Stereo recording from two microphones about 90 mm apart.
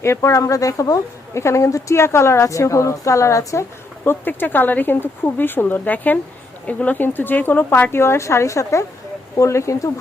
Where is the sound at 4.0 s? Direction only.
20° left (ahead or behind).